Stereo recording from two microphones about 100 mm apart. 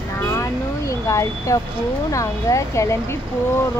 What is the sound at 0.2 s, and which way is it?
Vehicle, 30° left (ahead or behind).